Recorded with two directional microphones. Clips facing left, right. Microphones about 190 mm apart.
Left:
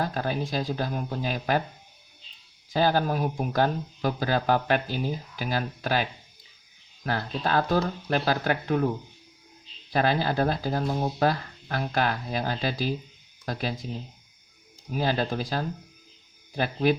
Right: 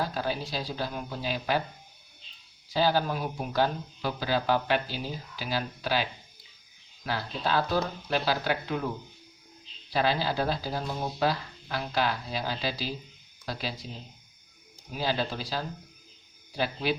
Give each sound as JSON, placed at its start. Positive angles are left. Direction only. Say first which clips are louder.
{"t": 0.0, "sound": "speech", "louder": "left 3 dB", "side_deg": 50}
{"t": 2.7, "sound": "speech", "louder": "left 2 dB", "side_deg": 50}
{"t": 9.9, "sound": "speech", "louder": "left 3 dB", "side_deg": 50}
{"t": 14.9, "sound": "speech", "louder": "left 4 dB", "side_deg": 50}